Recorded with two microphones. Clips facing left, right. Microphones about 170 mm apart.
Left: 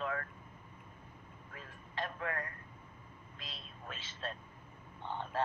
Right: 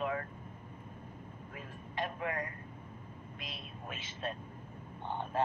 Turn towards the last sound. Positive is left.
turn(degrees=-15)  # may be behind; listen again after turning